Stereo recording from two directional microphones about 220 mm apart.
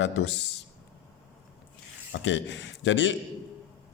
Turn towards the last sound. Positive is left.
turn(degrees=55)  # may be behind; listen again after turning